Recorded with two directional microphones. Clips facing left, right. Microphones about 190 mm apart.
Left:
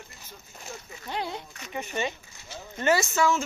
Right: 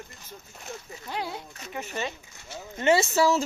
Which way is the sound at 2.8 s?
25° right (ahead or behind).